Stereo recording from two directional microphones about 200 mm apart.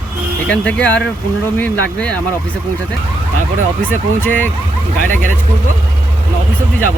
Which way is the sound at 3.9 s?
10° left (ahead or behind).